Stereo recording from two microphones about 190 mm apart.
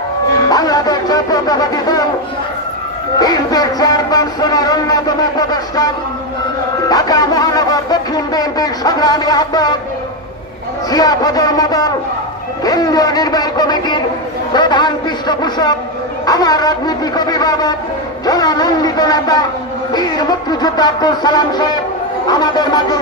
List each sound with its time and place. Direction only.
0.5 s music: 20° left (ahead or behind)
3.2 s speech: 20° left (ahead or behind)
6.9 s speech: 20° left (ahead or behind)
10.9 s speech: 20° left (ahead or behind)